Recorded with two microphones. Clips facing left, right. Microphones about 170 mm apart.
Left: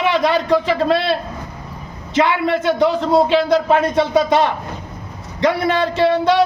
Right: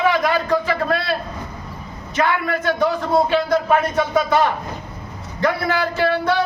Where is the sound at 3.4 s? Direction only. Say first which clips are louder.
Left 3 dB; 85° left.